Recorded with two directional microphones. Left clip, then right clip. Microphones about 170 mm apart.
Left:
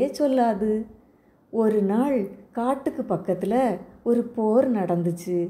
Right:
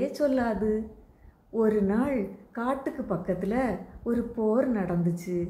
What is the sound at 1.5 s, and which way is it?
A woman's voice, 20° left (ahead or behind).